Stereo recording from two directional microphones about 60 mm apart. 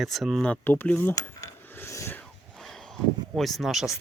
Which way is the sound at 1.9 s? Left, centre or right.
Left.